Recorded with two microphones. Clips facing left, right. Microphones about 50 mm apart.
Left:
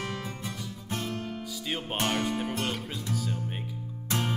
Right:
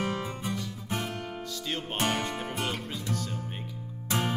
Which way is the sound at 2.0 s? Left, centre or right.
Centre.